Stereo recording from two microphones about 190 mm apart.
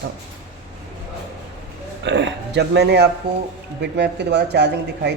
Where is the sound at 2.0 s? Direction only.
70° right (ahead or behind).